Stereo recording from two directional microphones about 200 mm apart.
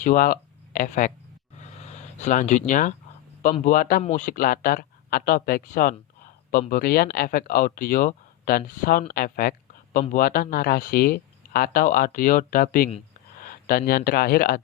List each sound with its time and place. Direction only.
0.0 s speech: 40° left (ahead or behind)